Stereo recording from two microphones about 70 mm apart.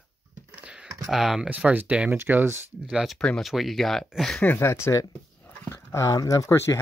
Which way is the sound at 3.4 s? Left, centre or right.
Centre.